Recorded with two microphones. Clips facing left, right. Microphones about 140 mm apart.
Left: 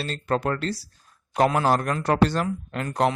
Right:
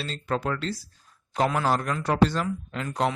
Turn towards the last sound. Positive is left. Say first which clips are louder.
# left 3 dB
turn(degrees=55)  # may be behind; listen again after turning